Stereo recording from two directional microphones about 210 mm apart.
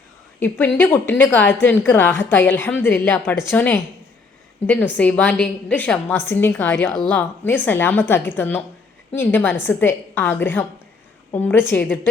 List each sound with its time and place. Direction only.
0.3 s a woman's voice: 10° left (ahead or behind)